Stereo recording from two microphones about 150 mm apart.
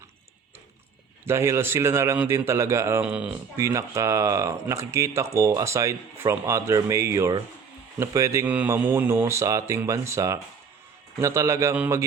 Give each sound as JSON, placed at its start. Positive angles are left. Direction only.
{"t": 1.2, "sound": "speech", "side_deg": -15}
{"t": 3.6, "sound": "speech", "side_deg": -20}